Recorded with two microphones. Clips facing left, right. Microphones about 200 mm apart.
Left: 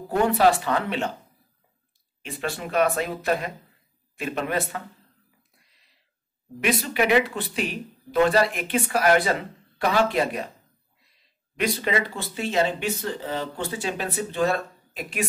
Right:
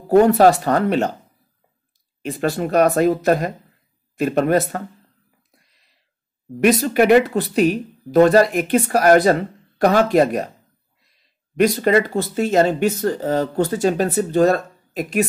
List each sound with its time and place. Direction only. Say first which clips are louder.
0.1 s speech: right 8 dB; 40° right (ahead or behind)
2.2 s speech: right 10 dB; 40° right (ahead or behind)
6.6 s speech: right 9 dB; 45° right (ahead or behind)
11.5 s speech: right 10 dB; 45° right (ahead or behind)